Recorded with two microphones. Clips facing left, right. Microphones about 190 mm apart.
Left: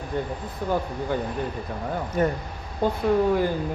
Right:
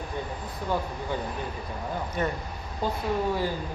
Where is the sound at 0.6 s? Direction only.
50° left (ahead or behind).